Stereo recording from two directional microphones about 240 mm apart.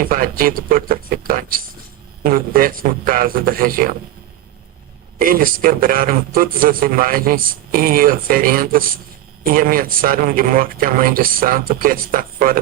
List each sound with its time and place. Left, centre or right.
0.0 s a man's voice: right
5.2 s a man's voice: right